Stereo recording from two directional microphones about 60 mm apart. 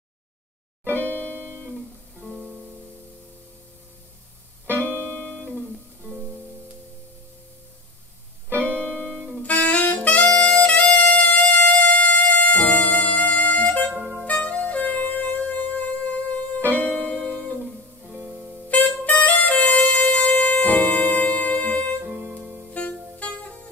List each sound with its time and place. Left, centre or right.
0.9 s music: left
2.2 s music: centre
4.7 s music: left
8.6 s music: left
9.4 s saxophone: left
14.2 s music: left
17.6 s music: centre
18.7 s music: left
22.0 s music: centre
22.7 s music: left